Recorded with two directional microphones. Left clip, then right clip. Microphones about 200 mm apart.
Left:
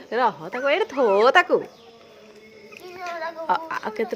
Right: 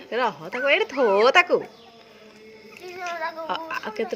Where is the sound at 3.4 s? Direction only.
15° left (ahead or behind).